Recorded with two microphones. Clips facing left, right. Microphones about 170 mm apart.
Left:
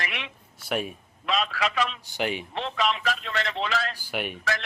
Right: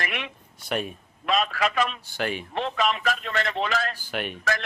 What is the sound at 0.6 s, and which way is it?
Speech, 5° left (ahead or behind).